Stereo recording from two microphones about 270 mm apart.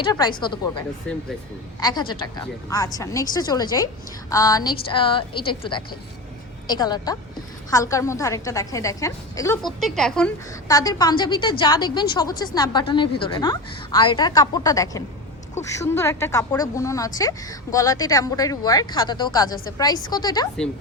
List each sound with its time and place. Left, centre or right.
0.0 s a woman's voice: centre
1.1 s speech: centre
1.8 s a woman's voice: centre
9.8 s speech: centre
10.7 s a woman's voice: centre